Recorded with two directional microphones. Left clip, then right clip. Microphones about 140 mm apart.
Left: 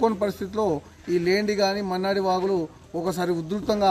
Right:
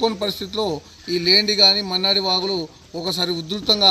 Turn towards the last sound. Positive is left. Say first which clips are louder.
# right 5 dB
turn(degrees=0)  # may be behind; listen again after turning